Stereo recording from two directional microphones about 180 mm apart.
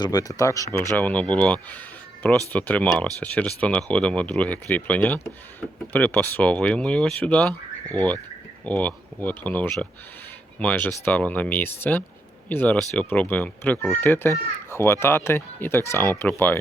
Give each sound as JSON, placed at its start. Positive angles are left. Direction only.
{"t": 0.0, "sound": "speech", "side_deg": 20}